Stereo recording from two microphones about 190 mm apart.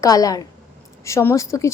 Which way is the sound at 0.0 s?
20° left (ahead or behind).